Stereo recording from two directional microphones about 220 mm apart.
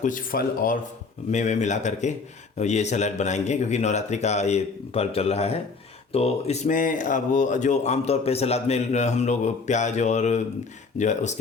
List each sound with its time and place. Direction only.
0.0 s speech: 40° left (ahead or behind)